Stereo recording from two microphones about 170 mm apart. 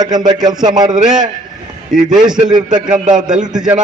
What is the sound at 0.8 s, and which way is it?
Speech, 45° right (ahead or behind).